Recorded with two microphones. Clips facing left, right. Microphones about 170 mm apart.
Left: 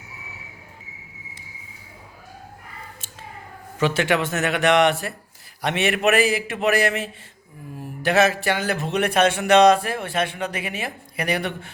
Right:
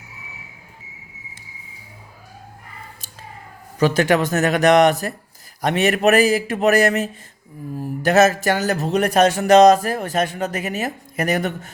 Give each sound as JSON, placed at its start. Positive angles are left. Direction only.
{"t": 3.8, "sound": "speech", "side_deg": -40}